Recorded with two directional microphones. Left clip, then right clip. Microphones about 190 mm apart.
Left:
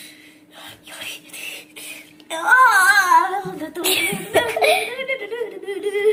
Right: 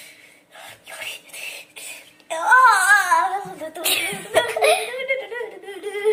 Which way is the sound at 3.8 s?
10° left (ahead or behind).